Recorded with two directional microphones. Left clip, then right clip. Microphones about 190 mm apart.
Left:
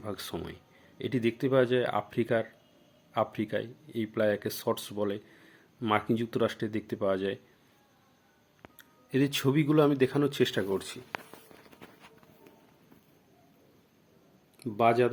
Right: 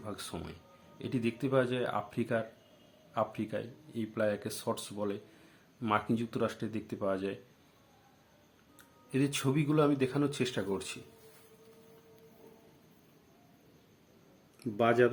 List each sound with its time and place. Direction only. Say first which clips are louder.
0.0 s speech: left 5 dB; 20° left (ahead or behind)
9.0 s speech: left 4 dB; 20° left (ahead or behind)
14.6 s speech: left 2 dB; 20° left (ahead or behind)